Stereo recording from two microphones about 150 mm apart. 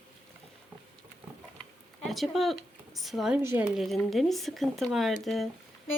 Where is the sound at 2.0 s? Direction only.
Centre (ahead or behind).